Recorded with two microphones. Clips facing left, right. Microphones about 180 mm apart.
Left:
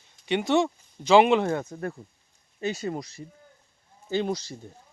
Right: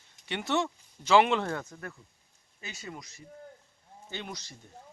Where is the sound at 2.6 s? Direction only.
35° left (ahead or behind).